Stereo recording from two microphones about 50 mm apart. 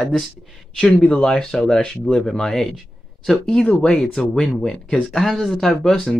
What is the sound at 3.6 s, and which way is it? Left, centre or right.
Speech, centre.